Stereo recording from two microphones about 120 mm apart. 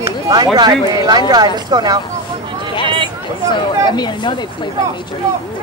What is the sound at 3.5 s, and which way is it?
Speech, 40° left (ahead or behind).